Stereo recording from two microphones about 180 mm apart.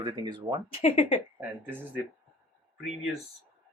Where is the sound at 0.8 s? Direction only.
30° left (ahead or behind).